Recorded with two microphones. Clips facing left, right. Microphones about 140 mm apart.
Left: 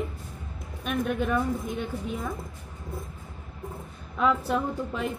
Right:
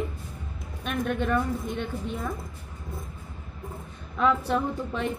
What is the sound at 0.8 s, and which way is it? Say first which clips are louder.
A woman's voice: even; 5° left (ahead or behind).